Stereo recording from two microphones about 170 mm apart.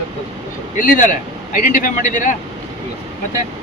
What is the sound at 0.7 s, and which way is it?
Speech, 50° left (ahead or behind).